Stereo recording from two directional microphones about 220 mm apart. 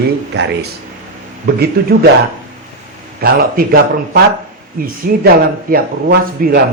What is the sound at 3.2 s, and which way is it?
Speech, 45° right (ahead or behind).